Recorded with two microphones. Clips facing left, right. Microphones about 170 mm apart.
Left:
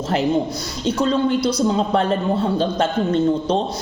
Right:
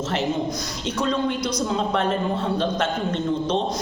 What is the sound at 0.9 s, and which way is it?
A woman's voice, 30° left (ahead or behind).